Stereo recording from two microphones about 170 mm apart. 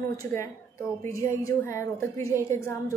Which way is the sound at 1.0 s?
15° left (ahead or behind).